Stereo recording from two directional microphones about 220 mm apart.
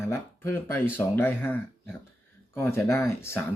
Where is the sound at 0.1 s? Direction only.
10° left (ahead or behind).